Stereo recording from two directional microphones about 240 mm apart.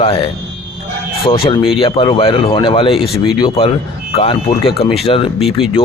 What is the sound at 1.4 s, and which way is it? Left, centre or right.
Speech, left.